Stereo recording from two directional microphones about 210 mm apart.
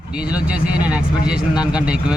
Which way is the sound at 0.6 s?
5° right (ahead or behind).